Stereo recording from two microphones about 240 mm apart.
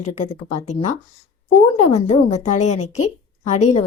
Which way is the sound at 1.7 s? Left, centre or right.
Left.